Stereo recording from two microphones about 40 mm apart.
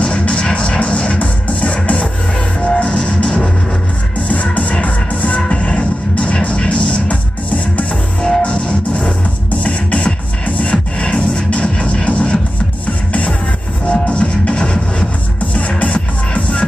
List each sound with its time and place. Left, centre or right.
0.0 s music: left
13.8 s music: left